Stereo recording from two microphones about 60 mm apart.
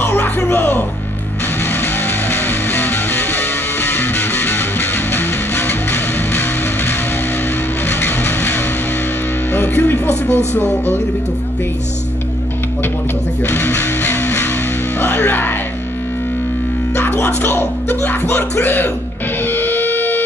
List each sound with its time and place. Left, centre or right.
0.0 s music: left
1.7 s music: left
7.9 s vehicle: left
9.8 s speech: left
13.4 s speech: left
15.0 s speech: left
17.1 s speech: left
19.4 s music: left